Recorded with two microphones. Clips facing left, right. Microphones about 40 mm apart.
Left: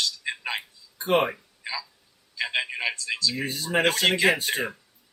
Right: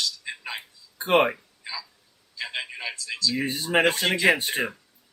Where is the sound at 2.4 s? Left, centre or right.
Left.